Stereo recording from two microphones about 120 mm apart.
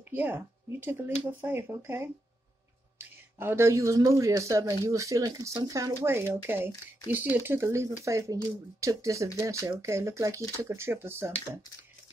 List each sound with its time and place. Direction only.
0.1 s speech: 15° right (ahead or behind)